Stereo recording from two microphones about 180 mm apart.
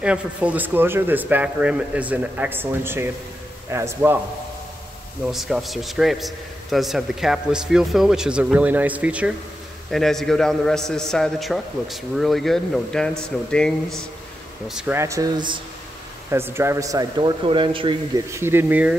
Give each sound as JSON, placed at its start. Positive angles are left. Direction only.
{"t": 0.0, "sound": "speech", "side_deg": -5}
{"t": 5.3, "sound": "a man's voice", "side_deg": 0}
{"t": 15.0, "sound": "a man's voice", "side_deg": -20}
{"t": 16.3, "sound": "a man's voice", "side_deg": -15}
{"t": 18.3, "sound": "speech", "side_deg": -15}